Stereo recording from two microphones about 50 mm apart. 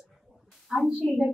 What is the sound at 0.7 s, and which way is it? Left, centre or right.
Speech, centre.